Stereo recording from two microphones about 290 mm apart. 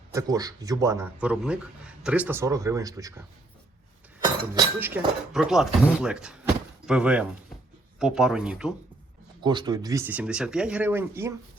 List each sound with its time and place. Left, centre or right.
0.1 s a man's voice: centre
4.5 s speech: centre
9.4 s a man's voice: centre